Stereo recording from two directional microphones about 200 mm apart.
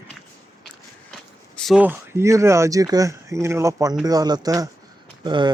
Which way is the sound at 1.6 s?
5° right (ahead or behind).